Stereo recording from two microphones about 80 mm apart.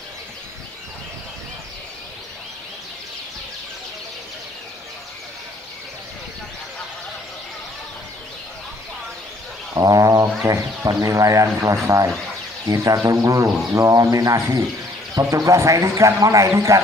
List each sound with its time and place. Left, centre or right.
9.8 s cat: right
10.4 s speech: right